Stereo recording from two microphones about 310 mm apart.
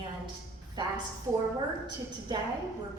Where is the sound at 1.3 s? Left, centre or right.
Centre.